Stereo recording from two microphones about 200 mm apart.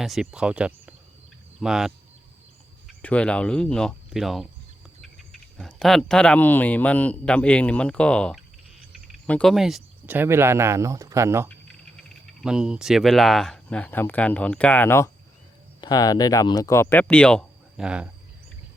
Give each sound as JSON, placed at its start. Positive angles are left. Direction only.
{"t": 0.0, "sound": "speech", "side_deg": 0}
{"t": 12.4, "sound": "speech", "side_deg": -5}